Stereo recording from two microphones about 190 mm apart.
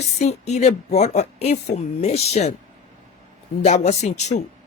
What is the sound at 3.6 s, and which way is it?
Speech, 35° left (ahead or behind).